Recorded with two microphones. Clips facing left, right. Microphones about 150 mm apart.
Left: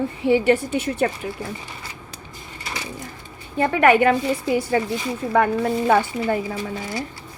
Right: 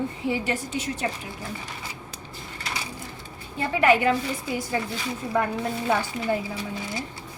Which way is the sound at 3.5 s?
60° left (ahead or behind).